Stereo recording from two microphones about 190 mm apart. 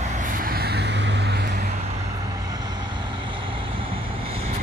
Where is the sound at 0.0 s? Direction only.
40° right (ahead or behind); by 1.7 s 60° right (ahead or behind).